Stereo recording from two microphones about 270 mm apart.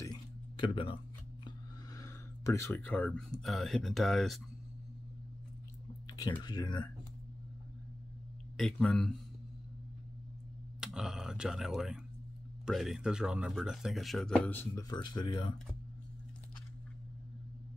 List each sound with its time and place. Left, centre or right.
0.0 s a sound: centre
2.0 s speech: centre
6.0 s speech: centre
8.5 s speech: centre
10.8 s speech: centre